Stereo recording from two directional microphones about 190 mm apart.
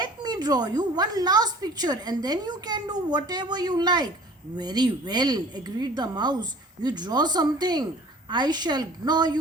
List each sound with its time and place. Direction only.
0.0 s a woman's voice: 20° right (ahead or behind)